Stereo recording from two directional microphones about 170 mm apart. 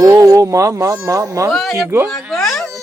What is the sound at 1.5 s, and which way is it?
Speech, centre (ahead or behind).